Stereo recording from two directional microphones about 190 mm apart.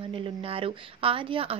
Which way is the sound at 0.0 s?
30° right (ahead or behind).